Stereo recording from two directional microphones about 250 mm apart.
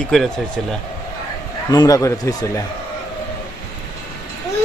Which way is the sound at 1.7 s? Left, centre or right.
Centre.